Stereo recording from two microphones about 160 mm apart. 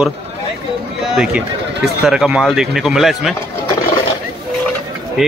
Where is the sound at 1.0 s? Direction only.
5° right (ahead or behind).